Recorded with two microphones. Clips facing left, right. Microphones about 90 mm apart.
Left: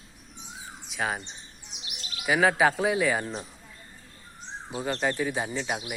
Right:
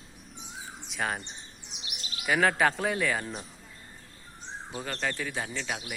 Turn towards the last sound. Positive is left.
turn(degrees=20)  # may be behind; listen again after turning